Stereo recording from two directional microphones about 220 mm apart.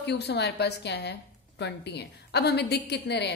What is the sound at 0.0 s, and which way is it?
A woman's voice, 50° left (ahead or behind).